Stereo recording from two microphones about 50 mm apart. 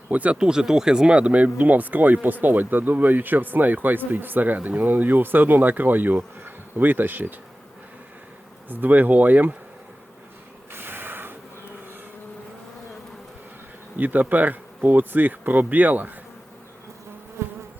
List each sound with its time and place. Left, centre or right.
0.1 s speech: right
0.3 s speech: centre; by 7.3 s right
8.7 s speech: right
10.7 s snort: right
13.9 s speech: right
17.4 s bee: right